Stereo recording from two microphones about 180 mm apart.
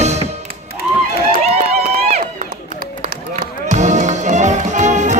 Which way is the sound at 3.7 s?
40° right (ahead or behind).